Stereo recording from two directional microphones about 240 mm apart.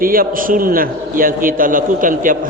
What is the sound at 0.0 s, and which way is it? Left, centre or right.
A man's voice, right.